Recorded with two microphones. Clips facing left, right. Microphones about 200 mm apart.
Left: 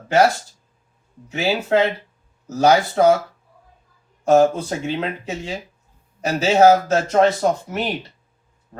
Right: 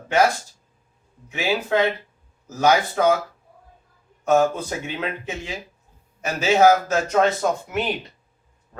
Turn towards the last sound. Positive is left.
turn(degrees=35)  # may be behind; listen again after turning